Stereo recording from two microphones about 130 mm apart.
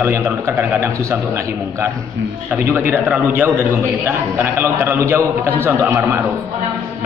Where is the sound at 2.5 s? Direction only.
15° right (ahead or behind).